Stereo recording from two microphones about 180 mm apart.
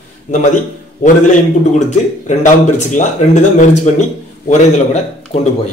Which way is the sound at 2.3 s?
40° left (ahead or behind).